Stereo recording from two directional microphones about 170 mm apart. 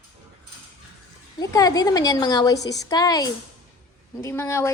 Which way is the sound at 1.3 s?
20° left (ahead or behind).